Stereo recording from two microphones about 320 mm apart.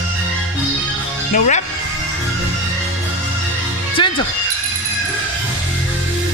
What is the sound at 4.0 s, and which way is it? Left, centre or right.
Music, centre.